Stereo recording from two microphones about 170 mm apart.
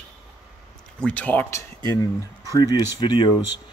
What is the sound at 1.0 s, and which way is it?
Speech, 10° left (ahead or behind).